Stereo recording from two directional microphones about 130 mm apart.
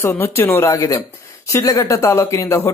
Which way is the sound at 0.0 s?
20° left (ahead or behind).